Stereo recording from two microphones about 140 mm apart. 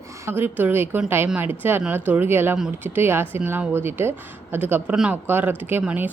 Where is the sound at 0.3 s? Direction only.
15° right (ahead or behind).